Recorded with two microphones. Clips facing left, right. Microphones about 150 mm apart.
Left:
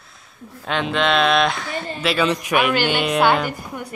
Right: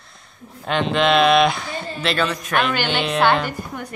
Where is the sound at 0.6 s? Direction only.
Centre (ahead or behind).